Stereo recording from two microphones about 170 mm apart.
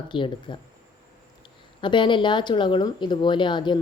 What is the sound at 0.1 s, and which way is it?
Speech, 30° left (ahead or behind).